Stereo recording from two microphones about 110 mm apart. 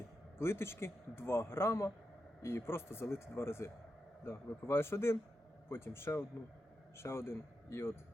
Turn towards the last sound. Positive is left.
turn(degrees=20)  # may be behind; listen again after turning